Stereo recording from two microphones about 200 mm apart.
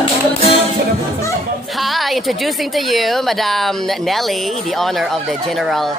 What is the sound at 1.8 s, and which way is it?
A woman's voice, centre (ahead or behind).